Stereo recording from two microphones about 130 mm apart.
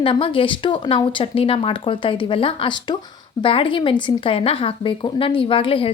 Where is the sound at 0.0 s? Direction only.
40° left (ahead or behind).